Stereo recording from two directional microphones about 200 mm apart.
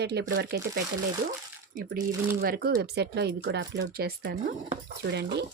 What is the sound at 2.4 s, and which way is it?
Speech, 50° right (ahead or behind).